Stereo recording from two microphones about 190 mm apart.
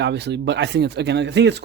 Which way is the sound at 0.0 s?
65° right (ahead or behind).